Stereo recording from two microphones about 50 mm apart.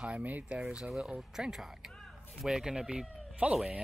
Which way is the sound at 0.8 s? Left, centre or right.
Centre.